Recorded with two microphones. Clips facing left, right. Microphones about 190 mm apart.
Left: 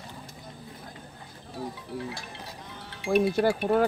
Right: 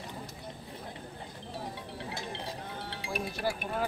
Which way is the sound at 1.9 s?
25° right (ahead or behind).